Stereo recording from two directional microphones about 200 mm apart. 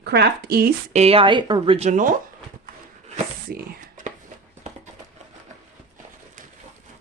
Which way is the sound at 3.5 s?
40° right (ahead or behind).